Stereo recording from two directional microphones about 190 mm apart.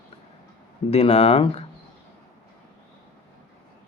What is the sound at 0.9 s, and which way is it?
Speech, 30° left (ahead or behind).